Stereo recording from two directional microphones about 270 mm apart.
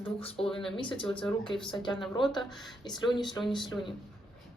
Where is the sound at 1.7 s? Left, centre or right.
Centre.